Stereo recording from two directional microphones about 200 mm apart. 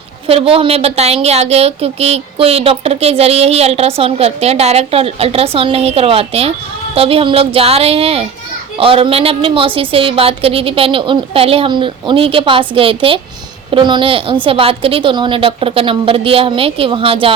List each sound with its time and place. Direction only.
0.3 s a woman's voice: 30° right (ahead or behind)